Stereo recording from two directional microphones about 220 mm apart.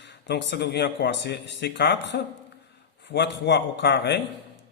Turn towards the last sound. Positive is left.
turn(degrees=50)  # may be behind; listen again after turning